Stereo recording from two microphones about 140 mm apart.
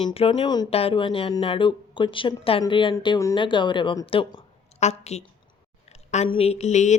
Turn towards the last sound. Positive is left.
turn(degrees=55)  # may be behind; listen again after turning